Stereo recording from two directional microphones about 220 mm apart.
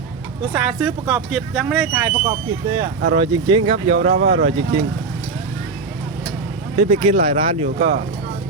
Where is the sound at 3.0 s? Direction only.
25° right (ahead or behind).